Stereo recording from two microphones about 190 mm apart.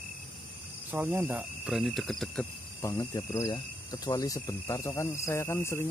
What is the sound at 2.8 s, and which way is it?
Speech, 15° left (ahead or behind).